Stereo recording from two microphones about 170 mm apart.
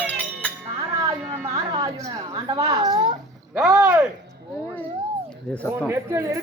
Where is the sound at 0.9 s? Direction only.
20° right (ahead or behind).